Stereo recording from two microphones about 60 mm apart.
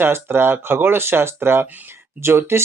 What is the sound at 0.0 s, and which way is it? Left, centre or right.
Speech, right.